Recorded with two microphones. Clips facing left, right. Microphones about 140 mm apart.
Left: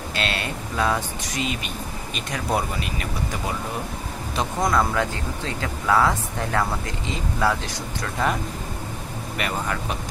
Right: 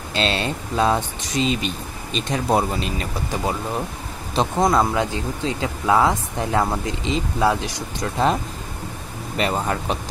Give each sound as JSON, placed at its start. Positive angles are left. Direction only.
{"t": 0.1, "sound": "speech", "side_deg": -25}
{"t": 4.4, "sound": "speech", "side_deg": -25}
{"t": 9.4, "sound": "speech", "side_deg": -30}